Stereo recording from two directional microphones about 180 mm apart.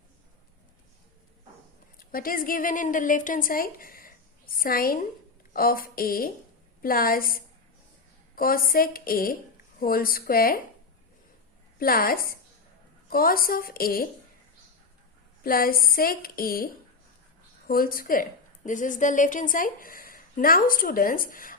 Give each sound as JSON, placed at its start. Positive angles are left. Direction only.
{"t": 2.0, "sound": "a woman's voice", "side_deg": 55}
{"t": 11.8, "sound": "speech", "side_deg": 55}
{"t": 15.4, "sound": "speech", "side_deg": 55}
{"t": 17.7, "sound": "a woman's voice", "side_deg": 55}